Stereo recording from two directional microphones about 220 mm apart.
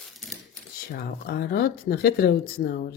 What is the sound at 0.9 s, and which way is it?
Speech, 45° left (ahead or behind).